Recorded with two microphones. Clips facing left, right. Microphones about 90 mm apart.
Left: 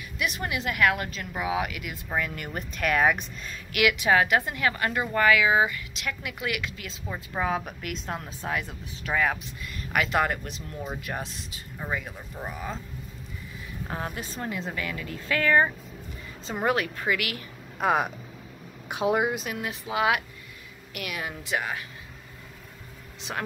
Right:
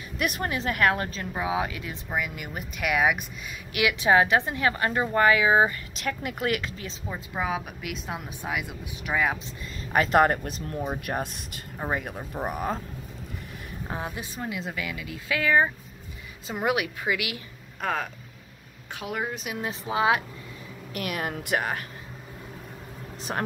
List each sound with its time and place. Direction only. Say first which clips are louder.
0.2 s a woman's voice: right 2 dB; 45° right (ahead or behind); by 2.0 s 25° right (ahead or behind)
2.1 s speech: left 1 dB; 10° right (ahead or behind)
3.7 s a woman's voice: right 1 dB; 25° right (ahead or behind)
7.1 s a woman's voice: left 1 dB; 5° right (ahead or behind)
9.9 s speech: right 5 dB; 40° right (ahead or behind)
11.1 s a woman's voice: right 4 dB; 30° right (ahead or behind)
11.9 s speech: right 3 dB; 50° right (ahead or behind)
13.8 s speech: even; 15° right (ahead or behind)
17.7 s speech: left 5 dB; 15° left (ahead or behind)
19.6 s a woman's voice: right 2 dB; 30° right (ahead or behind)
20.9 s speech: right 4 dB; 40° right (ahead or behind)
23.3 s a woman's voice: right 3 dB; 30° right (ahead or behind)